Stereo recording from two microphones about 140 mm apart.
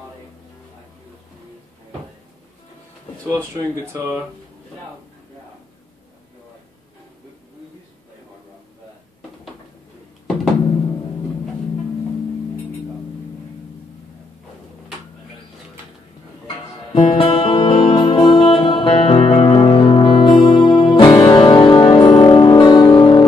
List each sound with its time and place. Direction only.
3.3 s speech: 15° right (ahead or behind)
16.9 s music: 35° left (ahead or behind)